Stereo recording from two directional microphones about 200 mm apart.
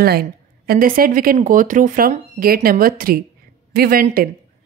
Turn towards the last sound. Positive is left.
turn(degrees=-45)  # may be behind; listen again after turning